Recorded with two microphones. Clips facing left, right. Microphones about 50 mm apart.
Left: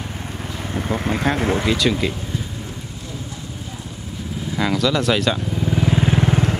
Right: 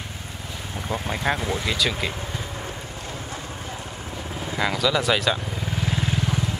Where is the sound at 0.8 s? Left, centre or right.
Left.